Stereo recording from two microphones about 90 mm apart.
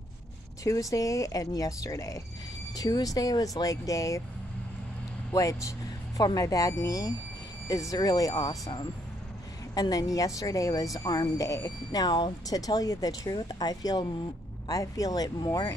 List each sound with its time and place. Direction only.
0.7 s a woman's voice: 40° left (ahead or behind)
5.3 s speech: 40° left (ahead or behind)
9.8 s a woman's voice: 45° left (ahead or behind)